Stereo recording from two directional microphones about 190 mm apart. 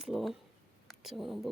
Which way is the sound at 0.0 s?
Centre (ahead or behind).